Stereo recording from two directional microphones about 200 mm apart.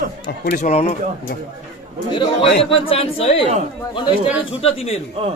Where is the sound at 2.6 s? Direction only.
30° left (ahead or behind).